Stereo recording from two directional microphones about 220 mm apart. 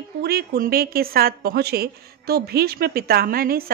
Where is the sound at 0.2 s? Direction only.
45° right (ahead or behind).